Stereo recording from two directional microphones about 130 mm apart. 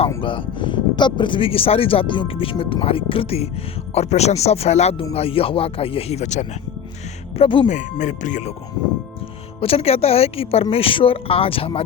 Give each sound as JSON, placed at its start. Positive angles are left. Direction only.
{"t": 0.2, "sound": "speech", "side_deg": 40}
{"t": 7.3, "sound": "speech", "side_deg": 40}
{"t": 7.7, "sound": "speech", "side_deg": 70}
{"t": 9.6, "sound": "speech", "side_deg": 50}